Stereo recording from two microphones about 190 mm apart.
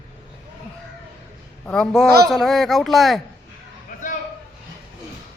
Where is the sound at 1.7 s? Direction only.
Centre (ahead or behind).